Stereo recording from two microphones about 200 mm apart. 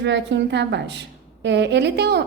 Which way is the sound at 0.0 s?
60° right (ahead or behind).